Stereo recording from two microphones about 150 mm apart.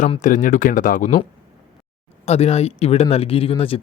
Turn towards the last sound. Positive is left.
turn(degrees=40)  # may be behind; listen again after turning